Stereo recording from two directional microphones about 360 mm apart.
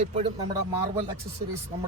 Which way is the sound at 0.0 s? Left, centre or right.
Centre.